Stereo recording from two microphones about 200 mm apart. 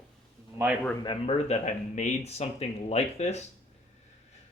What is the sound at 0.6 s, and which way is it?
Speech, 15° right (ahead or behind).